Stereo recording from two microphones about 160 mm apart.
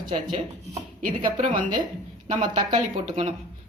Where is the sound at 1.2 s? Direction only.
35° right (ahead or behind).